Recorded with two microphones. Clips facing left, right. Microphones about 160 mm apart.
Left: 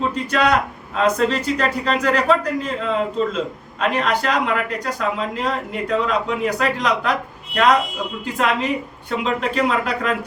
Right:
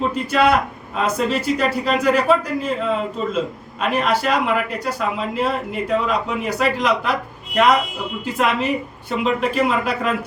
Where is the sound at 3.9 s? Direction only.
10° right (ahead or behind).